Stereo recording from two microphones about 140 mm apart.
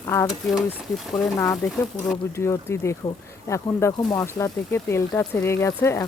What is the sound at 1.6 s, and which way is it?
Speech, 20° left (ahead or behind).